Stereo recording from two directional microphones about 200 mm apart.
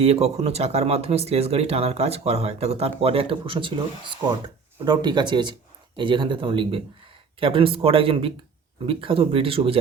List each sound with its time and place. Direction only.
0.0 s speech: 30° right (ahead or behind)